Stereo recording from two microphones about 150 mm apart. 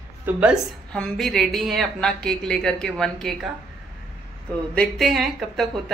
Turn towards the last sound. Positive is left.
turn(degrees=0)  # may be behind; listen again after turning